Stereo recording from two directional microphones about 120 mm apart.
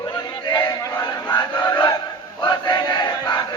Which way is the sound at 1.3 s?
35° left (ahead or behind).